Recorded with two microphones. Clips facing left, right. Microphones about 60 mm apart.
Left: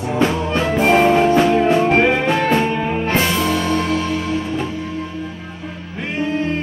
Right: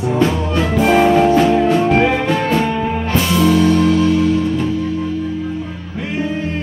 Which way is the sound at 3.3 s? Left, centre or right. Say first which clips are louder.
Right 6 dB; left.